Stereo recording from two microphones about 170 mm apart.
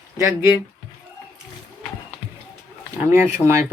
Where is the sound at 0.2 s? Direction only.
15° right (ahead or behind).